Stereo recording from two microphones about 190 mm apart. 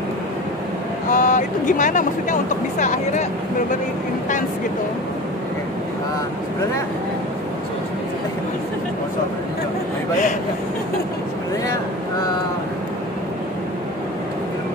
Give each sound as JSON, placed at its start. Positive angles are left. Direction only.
{"t": 1.1, "sound": "speech", "side_deg": 45}